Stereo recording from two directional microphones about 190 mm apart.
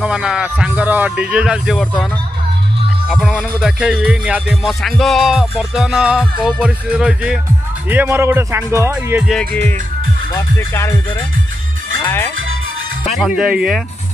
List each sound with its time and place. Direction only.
0.0 s music: 5° right (ahead or behind)
3.1 s music: centre (ahead or behind)
7.9 s speech: 10° right (ahead or behind)
9.3 s music: 5° left (ahead or behind)
12.0 s speech: 10° left (ahead or behind)
13.4 s music: 5° right (ahead or behind)